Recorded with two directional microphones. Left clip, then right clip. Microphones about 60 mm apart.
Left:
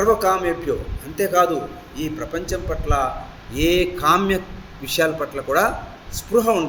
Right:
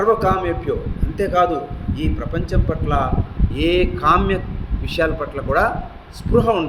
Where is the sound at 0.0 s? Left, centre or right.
Centre.